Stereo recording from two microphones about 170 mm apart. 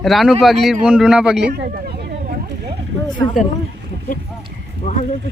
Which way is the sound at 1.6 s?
70° right (ahead or behind).